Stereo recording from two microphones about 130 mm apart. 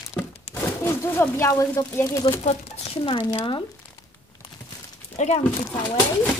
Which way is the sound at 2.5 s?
45° left (ahead or behind).